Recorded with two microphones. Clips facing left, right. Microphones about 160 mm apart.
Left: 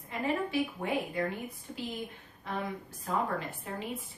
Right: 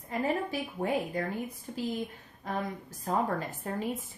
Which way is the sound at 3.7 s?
45° right (ahead or behind).